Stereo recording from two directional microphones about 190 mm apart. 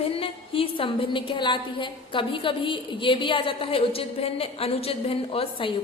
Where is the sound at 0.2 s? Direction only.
30° left (ahead or behind).